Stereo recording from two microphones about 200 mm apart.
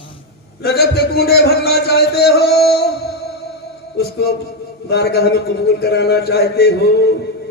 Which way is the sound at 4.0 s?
55° left (ahead or behind).